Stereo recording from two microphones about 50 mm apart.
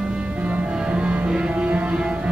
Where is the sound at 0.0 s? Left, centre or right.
Centre.